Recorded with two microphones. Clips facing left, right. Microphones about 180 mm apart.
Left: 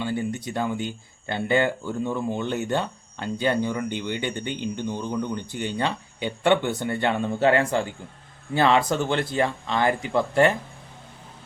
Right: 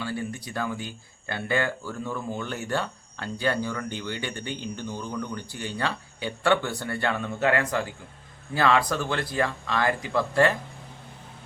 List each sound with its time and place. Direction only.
0.0 s speech: 20° left (ahead or behind)